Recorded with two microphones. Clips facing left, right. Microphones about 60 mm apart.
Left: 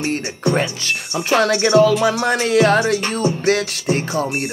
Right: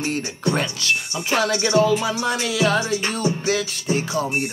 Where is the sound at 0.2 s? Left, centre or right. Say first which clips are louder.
Left 3 dB; left.